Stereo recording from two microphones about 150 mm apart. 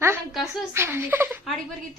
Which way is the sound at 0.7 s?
15° right (ahead or behind).